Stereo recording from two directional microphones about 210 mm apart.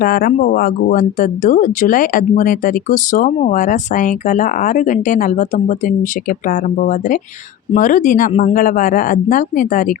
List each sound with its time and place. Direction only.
0.0 s speech: 45° left (ahead or behind)